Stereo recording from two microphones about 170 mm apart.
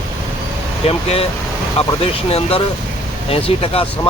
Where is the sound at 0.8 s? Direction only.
35° left (ahead or behind).